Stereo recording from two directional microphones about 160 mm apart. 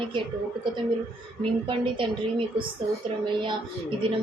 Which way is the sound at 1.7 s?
30° right (ahead or behind).